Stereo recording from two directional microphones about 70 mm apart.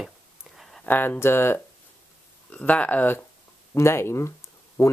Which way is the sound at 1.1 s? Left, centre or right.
Left.